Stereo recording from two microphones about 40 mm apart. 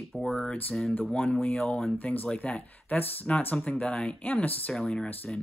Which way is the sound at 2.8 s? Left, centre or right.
Left.